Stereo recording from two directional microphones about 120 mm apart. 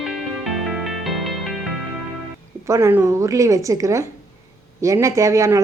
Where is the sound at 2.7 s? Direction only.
20° right (ahead or behind).